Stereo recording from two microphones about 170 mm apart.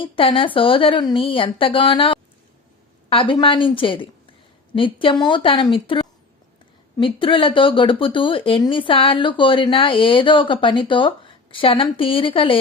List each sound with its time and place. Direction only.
0.0 s a woman's voice: 30° left (ahead or behind)